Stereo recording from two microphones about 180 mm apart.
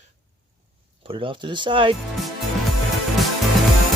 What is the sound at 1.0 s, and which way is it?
Speech, 30° right (ahead or behind).